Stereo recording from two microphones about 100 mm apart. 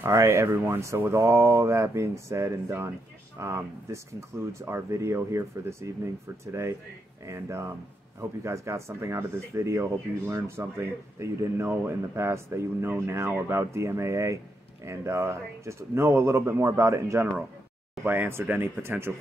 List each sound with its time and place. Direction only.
0.0 s speech: 25° right (ahead or behind)